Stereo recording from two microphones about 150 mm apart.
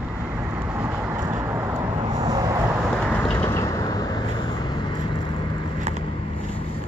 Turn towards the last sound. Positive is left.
turn(degrees=-50)  # may be behind; listen again after turning